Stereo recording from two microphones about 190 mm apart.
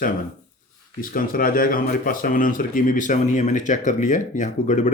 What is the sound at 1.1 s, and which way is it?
Speech, 50° left (ahead or behind).